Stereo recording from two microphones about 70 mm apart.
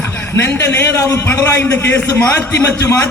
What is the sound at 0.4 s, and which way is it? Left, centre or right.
Speech, left.